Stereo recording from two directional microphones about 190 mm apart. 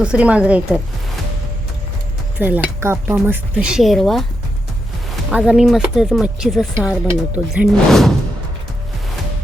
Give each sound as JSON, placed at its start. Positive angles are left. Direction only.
{"t": 0.0, "sound": "speech", "side_deg": -5}
{"t": 2.4, "sound": "speech", "side_deg": -10}
{"t": 5.3, "sound": "speech", "side_deg": -5}